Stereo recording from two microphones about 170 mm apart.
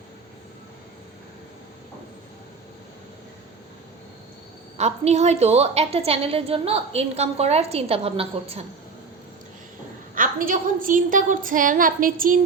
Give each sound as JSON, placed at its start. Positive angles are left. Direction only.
{"t": 4.8, "sound": "a woman's voice", "side_deg": -40}
{"t": 10.2, "sound": "a woman's voice", "side_deg": -55}